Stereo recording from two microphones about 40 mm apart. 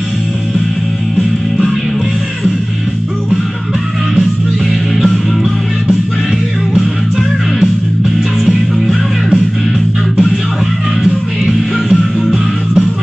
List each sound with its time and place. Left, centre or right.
6.7 s music: centre
11.0 s music: centre